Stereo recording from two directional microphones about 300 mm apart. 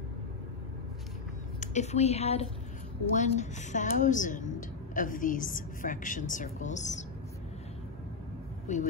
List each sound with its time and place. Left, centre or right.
1.6 s a woman's voice: left
8.7 s a woman's voice: left